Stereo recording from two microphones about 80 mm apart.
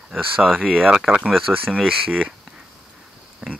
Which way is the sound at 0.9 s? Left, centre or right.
Centre.